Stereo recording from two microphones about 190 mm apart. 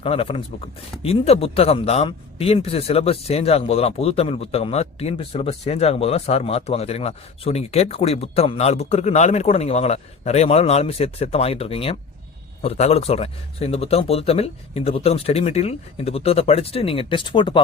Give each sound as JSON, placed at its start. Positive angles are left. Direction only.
{"t": 0.0, "sound": "speech", "side_deg": 30}